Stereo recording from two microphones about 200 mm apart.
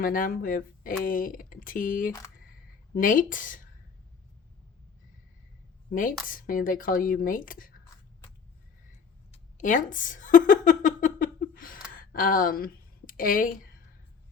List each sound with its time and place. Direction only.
0.0 s speech: 45° left (ahead or behind)
5.9 s speech: 45° left (ahead or behind)
9.3 s a sound: 40° left (ahead or behind)
11.9 s speech: 45° left (ahead or behind)